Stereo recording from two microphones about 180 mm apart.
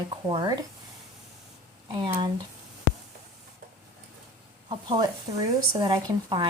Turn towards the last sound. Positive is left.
turn(degrees=-25)  # may be behind; listen again after turning